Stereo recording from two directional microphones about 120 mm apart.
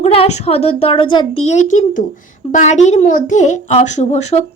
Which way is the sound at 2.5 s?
75° left (ahead or behind).